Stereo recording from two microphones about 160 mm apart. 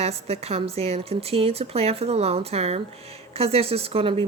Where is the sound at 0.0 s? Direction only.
40° right (ahead or behind).